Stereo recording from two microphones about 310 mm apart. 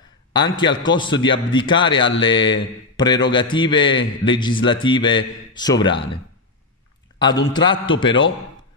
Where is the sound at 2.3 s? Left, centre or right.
Left.